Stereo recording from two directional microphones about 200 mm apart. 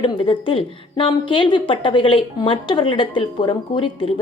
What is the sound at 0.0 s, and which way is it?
A woman's voice, 25° left (ahead or behind).